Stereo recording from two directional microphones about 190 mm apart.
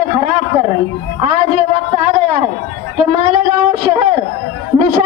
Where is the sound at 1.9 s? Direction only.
35° right (ahead or behind).